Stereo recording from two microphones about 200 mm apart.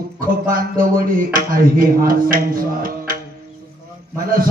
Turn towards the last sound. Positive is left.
turn(degrees=-45)  # may be behind; listen again after turning